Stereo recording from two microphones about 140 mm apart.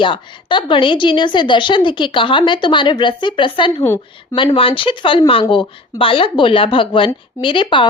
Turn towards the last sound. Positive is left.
turn(degrees=35)  # may be behind; listen again after turning